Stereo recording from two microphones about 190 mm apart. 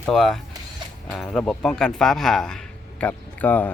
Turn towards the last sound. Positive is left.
turn(degrees=10)  # may be behind; listen again after turning